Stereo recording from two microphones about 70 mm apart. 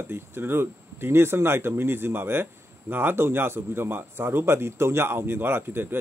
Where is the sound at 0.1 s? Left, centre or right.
Right.